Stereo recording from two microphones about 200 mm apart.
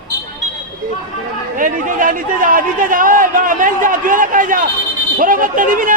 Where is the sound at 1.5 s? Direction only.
40° right (ahead or behind).